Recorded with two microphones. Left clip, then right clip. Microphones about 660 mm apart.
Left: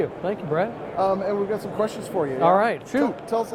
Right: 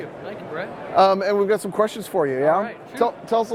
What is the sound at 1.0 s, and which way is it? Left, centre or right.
A man's voice, right.